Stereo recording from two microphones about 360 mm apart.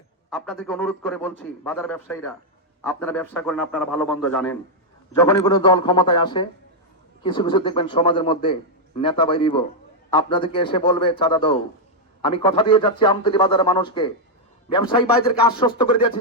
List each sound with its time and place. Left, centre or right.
0.3 s a man's voice: centre